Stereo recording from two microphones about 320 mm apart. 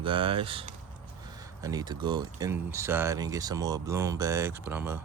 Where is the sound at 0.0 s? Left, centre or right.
Centre.